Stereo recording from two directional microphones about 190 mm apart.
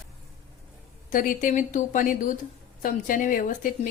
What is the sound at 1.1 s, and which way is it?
Speech, 45° left (ahead or behind).